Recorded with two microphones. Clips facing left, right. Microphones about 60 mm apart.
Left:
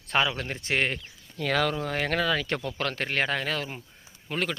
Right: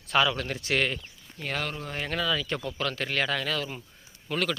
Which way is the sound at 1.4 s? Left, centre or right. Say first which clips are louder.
Left 7 dB; left.